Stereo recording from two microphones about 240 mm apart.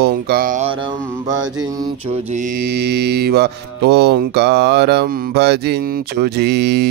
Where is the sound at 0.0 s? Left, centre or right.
Right.